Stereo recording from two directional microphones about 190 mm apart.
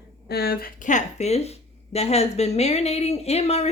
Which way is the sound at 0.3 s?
55° left (ahead or behind).